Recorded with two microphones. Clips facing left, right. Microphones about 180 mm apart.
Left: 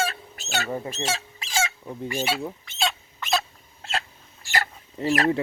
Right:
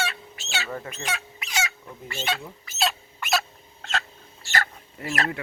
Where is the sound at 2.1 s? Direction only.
10° left (ahead or behind).